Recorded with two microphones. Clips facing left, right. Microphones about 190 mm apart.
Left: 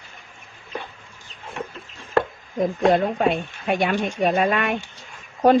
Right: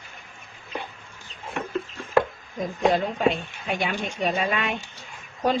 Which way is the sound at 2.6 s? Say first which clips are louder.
Left 4 dB; 55° left (ahead or behind).